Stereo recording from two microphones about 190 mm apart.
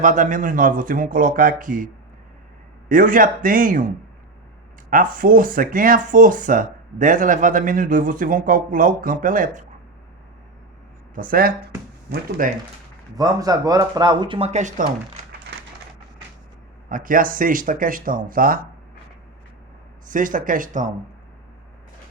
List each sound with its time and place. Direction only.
0.0 s speech: 40° right (ahead or behind)
2.9 s speech: 45° right (ahead or behind)
11.1 s speech: 45° right (ahead or behind)
13.1 s speech: 20° right (ahead or behind); by 14.8 s 40° right (ahead or behind)
16.9 s speech: 45° right (ahead or behind)
20.1 s speech: 45° right (ahead or behind)